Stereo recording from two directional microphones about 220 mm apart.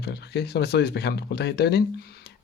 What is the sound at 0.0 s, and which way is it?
Speech, 50° left (ahead or behind).